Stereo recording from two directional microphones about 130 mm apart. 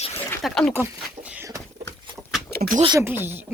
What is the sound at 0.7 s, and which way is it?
Speech, 15° right (ahead or behind).